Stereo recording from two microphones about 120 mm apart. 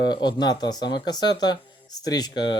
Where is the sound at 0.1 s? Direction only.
35° left (ahead or behind).